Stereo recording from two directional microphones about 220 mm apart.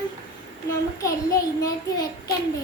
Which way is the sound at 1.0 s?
15° left (ahead or behind).